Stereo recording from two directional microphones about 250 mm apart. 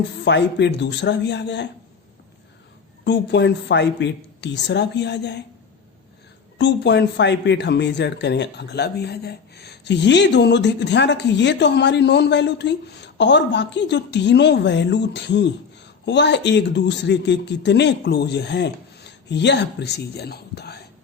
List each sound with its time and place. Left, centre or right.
0.3 s speech: left
3.0 s speech: left
6.6 s speech: left